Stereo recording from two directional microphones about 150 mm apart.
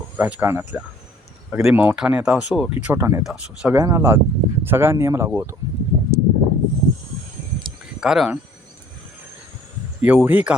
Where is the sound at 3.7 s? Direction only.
20° right (ahead or behind).